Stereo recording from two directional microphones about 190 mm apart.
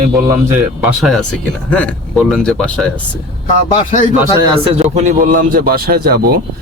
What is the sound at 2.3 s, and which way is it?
Speech, 5° left (ahead or behind).